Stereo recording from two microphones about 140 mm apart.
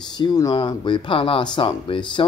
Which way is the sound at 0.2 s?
30° left (ahead or behind).